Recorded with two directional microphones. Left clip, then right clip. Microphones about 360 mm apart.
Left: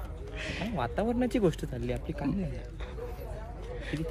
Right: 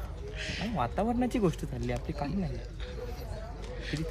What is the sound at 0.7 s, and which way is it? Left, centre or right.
Speech, centre.